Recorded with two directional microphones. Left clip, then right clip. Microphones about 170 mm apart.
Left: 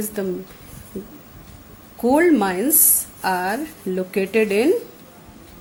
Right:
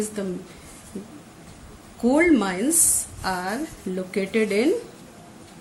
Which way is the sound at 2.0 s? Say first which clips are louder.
Left 3 dB; 50° left (ahead or behind).